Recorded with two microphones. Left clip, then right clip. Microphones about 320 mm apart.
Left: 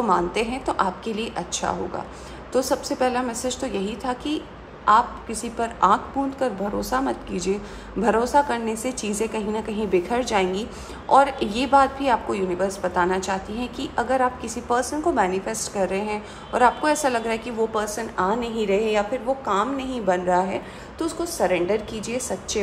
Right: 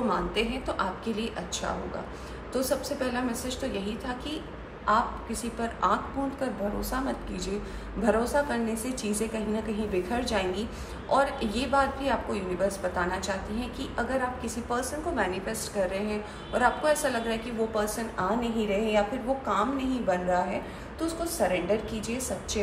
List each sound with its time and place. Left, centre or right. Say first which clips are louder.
0.1 s a woman's voice: left 7 dB; centre